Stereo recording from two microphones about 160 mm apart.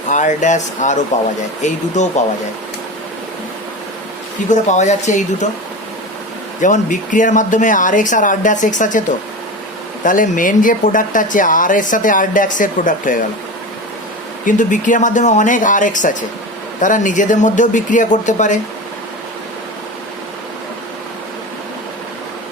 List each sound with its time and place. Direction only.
0.1 s speech: 50° left (ahead or behind)
4.4 s speech: 50° left (ahead or behind)
6.6 s speech: 55° left (ahead or behind)
14.4 s speech: 55° left (ahead or behind)